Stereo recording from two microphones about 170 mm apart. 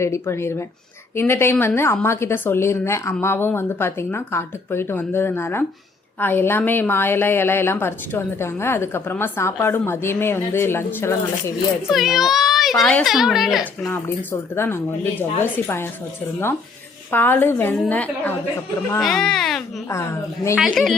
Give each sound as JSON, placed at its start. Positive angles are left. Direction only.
{"t": 0.0, "sound": "a woman's voice", "side_deg": 15}
{"t": 11.9, "sound": "a child's voice", "side_deg": 0}
{"t": 13.9, "sound": "a woman's voice", "side_deg": 10}
{"t": 17.1, "sound": "a woman's voice", "side_deg": 10}
{"t": 19.9, "sound": "a woman's voice", "side_deg": 15}
{"t": 20.6, "sound": "a child's voice", "side_deg": 0}